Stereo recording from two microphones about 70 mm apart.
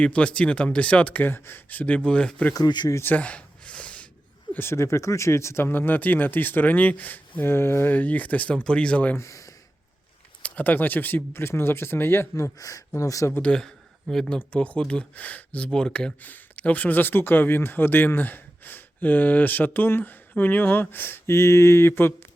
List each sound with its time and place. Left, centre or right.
0.0 s speech: centre
2.6 s speech: left
3.0 s a sound: left
4.5 s speech: left
7.9 s speech: left
9.1 s speech: left
10.4 s speech: left
13.4 s speech: centre
14.3 s speech: centre